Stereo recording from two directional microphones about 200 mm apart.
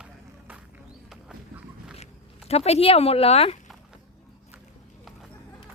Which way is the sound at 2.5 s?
30° left (ahead or behind).